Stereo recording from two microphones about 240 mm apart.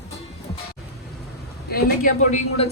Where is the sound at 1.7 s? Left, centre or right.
Left.